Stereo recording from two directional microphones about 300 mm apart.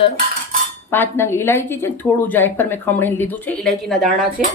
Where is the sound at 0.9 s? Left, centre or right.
Centre.